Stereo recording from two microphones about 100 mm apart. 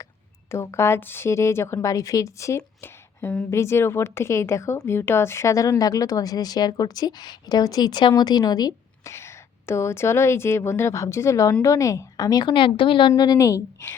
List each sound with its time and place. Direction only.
0.5 s a woman's voice: 25° left (ahead or behind)
9.0 s a woman's voice: 25° left (ahead or behind)